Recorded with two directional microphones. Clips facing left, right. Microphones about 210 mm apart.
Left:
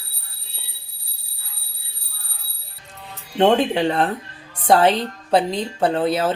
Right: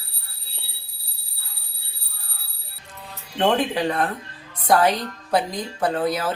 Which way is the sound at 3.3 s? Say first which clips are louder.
Left 4 dB; 25° left (ahead or behind).